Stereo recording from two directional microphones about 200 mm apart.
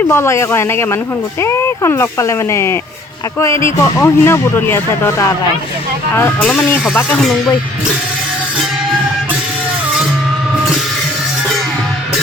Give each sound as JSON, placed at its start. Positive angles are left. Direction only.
{"t": 0.1, "sound": "speech", "side_deg": 15}